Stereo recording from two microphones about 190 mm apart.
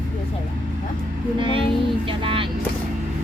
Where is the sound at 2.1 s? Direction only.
30° right (ahead or behind).